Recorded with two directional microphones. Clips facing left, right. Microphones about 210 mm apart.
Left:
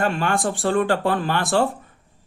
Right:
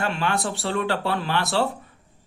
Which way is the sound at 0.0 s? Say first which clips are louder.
Left 4 dB; 50° left (ahead or behind).